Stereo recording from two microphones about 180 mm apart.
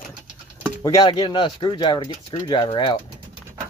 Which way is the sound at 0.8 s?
25° left (ahead or behind).